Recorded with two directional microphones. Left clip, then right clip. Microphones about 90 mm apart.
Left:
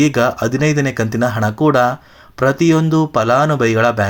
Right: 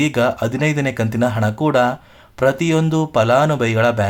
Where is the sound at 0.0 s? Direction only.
20° left (ahead or behind).